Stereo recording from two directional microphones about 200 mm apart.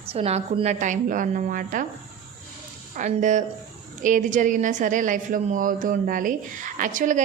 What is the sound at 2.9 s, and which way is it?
A woman's voice, 35° right (ahead or behind).